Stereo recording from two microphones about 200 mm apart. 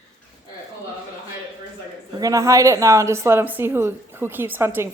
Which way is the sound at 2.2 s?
15° right (ahead or behind).